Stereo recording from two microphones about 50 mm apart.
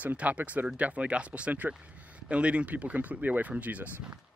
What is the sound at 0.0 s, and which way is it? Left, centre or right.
A man's voice, right.